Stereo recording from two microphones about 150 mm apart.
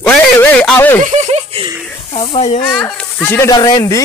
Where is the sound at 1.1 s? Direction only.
50° right (ahead or behind).